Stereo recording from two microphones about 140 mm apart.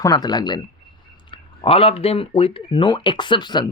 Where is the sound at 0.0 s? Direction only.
30° left (ahead or behind).